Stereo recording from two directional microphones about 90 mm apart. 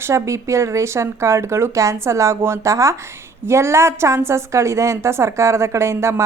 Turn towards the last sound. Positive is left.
turn(degrees=-30)  # may be behind; listen again after turning